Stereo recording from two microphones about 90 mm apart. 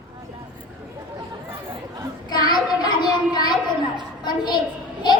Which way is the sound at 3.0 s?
50° left (ahead or behind).